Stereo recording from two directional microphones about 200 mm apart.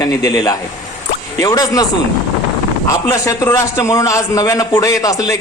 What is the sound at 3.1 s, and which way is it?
Speech, 15° left (ahead or behind).